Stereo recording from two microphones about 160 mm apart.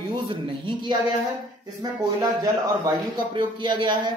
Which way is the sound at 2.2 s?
20° right (ahead or behind).